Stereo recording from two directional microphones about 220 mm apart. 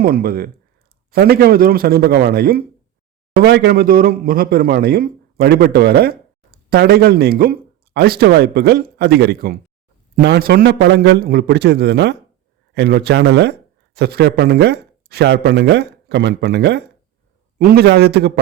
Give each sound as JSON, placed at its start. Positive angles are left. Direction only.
{"t": 0.0, "sound": "speech", "side_deg": -45}